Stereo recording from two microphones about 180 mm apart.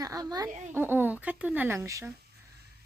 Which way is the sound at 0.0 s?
20° right (ahead or behind).